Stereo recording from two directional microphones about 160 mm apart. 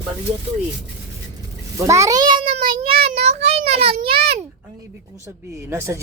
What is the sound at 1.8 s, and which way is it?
A child's voice, 20° right (ahead or behind).